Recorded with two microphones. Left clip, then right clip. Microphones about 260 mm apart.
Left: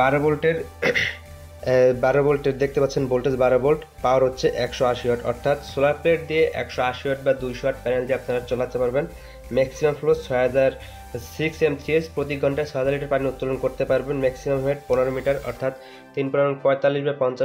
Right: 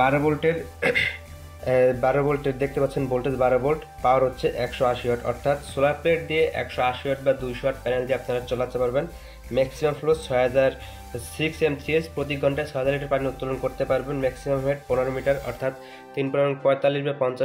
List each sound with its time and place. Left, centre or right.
0.0 s speech: centre
15.3 s speech: centre